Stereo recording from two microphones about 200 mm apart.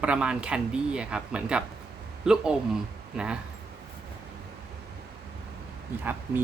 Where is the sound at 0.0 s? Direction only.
5° right (ahead or behind).